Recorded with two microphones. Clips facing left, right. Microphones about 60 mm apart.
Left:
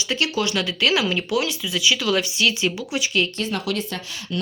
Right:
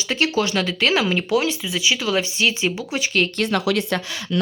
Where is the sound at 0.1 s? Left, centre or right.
Right.